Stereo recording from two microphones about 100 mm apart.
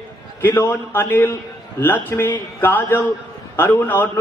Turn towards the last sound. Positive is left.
turn(degrees=20)  # may be behind; listen again after turning